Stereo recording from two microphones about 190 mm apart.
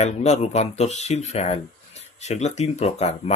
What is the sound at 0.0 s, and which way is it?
Speech, 35° left (ahead or behind).